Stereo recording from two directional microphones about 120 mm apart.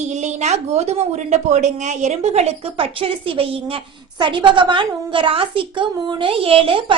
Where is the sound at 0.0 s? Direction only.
80° right.